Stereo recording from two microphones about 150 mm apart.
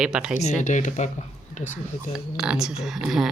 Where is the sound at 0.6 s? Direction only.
55° left (ahead or behind).